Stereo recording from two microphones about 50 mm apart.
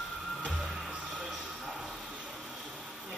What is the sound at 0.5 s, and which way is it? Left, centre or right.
Music, centre.